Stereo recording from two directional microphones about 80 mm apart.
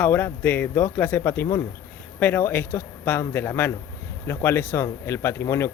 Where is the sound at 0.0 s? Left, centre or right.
Left.